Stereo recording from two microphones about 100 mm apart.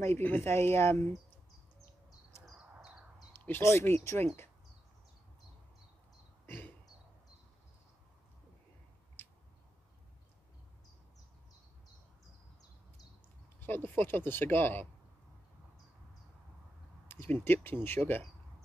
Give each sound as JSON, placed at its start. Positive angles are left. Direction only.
{"t": 0.0, "sound": "speech", "side_deg": 20}
{"t": 2.6, "sound": "a sound", "side_deg": -10}
{"t": 3.3, "sound": "speech", "side_deg": 20}
{"t": 6.4, "sound": "throat clearing", "side_deg": 20}
{"t": 9.2, "sound": "a sound", "side_deg": 20}
{"t": 13.6, "sound": "speech", "side_deg": 20}
{"t": 17.1, "sound": "speech", "side_deg": 20}